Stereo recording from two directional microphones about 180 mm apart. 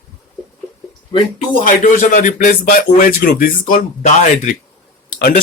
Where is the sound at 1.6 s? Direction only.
50° left (ahead or behind).